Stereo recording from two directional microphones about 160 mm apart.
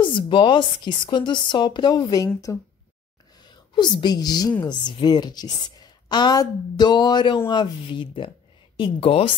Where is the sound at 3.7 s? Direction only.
25° left (ahead or behind).